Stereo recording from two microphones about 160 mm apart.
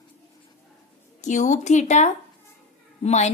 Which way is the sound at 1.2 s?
50° left (ahead or behind).